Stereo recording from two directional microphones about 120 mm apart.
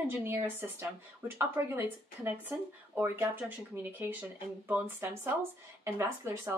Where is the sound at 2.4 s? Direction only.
15° right (ahead or behind).